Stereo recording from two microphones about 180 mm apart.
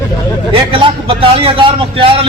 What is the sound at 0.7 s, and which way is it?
A man's voice, 30° right (ahead or behind).